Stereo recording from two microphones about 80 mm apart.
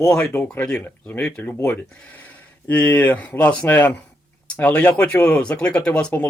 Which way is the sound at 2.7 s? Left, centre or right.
Left.